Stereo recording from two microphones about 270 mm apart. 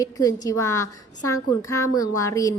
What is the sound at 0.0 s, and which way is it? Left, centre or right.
A woman's voice, centre.